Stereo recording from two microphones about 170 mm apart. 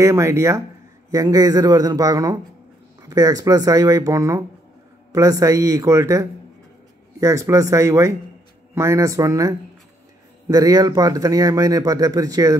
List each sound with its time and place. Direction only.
0.0 s speech: 15° right (ahead or behind)